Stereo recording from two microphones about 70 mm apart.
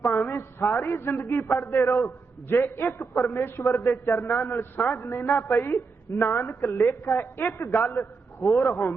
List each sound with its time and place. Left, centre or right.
0.0 s a man's voice: left